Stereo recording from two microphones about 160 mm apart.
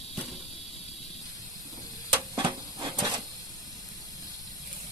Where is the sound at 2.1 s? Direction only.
30° right (ahead or behind).